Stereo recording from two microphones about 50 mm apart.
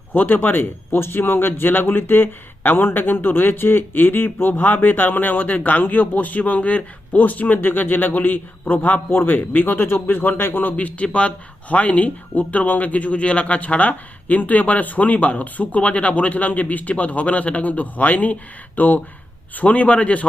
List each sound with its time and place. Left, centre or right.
0.1 s speech: left
0.9 s a man's voice: left